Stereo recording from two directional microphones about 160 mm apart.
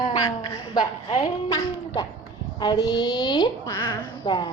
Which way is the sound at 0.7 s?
35° left (ahead or behind).